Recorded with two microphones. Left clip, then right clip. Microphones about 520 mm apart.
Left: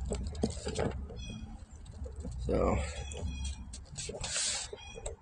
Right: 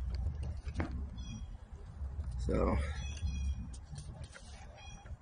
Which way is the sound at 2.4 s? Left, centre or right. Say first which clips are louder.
Left 4 dB; right.